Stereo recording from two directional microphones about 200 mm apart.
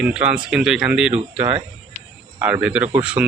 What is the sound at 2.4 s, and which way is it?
Speech, 5° right (ahead or behind).